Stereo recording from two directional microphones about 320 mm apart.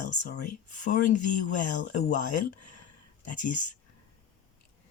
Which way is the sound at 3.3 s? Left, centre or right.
Left.